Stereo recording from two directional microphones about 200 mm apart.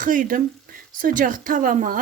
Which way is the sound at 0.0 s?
40° right (ahead or behind).